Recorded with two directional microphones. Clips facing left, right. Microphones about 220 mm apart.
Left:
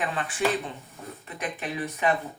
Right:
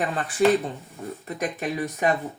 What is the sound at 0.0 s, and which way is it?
Speech, 40° right (ahead or behind).